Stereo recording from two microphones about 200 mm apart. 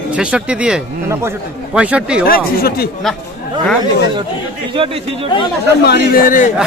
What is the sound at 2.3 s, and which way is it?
Speech, 50° left (ahead or behind).